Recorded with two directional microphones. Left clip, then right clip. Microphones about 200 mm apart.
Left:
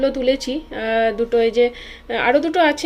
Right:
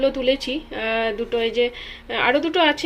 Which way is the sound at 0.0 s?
5° left (ahead or behind).